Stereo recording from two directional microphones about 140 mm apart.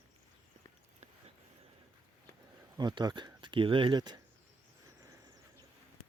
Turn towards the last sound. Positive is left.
turn(degrees=-30)  # may be behind; listen again after turning